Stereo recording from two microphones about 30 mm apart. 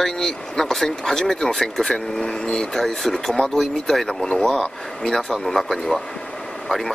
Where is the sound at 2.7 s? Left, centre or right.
Centre.